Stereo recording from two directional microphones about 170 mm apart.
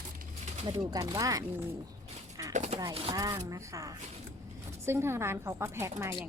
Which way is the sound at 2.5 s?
45° right (ahead or behind).